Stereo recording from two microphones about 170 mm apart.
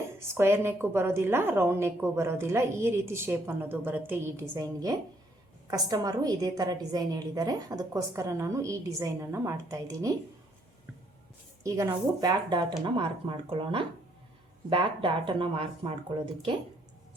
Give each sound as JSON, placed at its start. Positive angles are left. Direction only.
{"t": 0.3, "sound": "a woman's voice", "side_deg": -15}
{"t": 11.6, "sound": "a woman's voice", "side_deg": -20}